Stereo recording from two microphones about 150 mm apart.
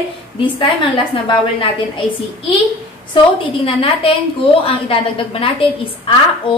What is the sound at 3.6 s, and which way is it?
A woman's voice, 35° left (ahead or behind).